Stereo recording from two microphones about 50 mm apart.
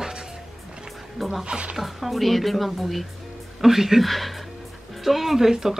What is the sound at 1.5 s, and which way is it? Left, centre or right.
Speech, right.